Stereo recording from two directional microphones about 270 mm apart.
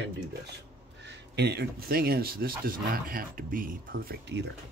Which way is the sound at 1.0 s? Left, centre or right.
Right.